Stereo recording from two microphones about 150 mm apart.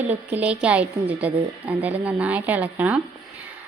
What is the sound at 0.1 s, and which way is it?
Speech, 10° right (ahead or behind).